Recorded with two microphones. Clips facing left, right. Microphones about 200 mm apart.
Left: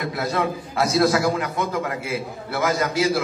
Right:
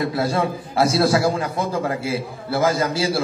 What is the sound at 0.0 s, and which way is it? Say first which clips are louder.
A man's voice: right 3 dB; 30° right (ahead or behind).